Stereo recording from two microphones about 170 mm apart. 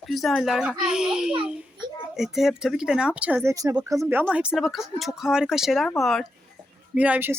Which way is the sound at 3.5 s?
20° right (ahead or behind).